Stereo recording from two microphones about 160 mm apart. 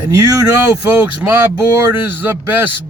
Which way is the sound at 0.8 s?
10° right (ahead or behind).